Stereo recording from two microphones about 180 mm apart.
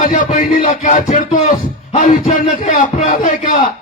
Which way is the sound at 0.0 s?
45° left (ahead or behind).